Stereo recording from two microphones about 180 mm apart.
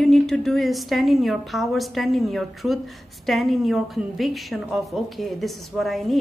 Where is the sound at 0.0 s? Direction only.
Centre (ahead or behind).